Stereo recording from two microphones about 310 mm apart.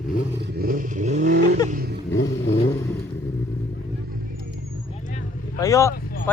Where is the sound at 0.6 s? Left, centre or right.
Right.